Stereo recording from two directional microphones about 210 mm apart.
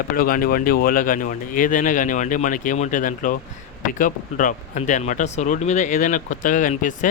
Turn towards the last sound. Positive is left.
turn(degrees=40)  # may be behind; listen again after turning